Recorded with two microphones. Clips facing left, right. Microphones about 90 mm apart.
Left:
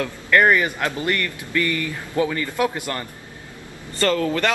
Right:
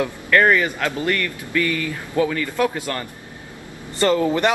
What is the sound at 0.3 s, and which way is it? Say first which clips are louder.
A man's voice: even; 15° left (ahead or behind).